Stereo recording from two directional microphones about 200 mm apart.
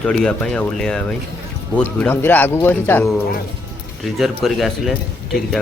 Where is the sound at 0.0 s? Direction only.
5° left (ahead or behind).